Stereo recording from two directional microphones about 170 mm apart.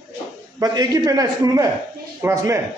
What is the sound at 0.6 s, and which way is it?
A man's voice, 20° right (ahead or behind).